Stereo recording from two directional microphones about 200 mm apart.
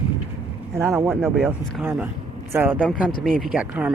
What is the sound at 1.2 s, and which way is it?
Speech, 10° right (ahead or behind).